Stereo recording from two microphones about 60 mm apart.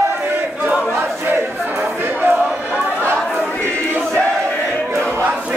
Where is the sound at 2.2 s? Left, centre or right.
Right.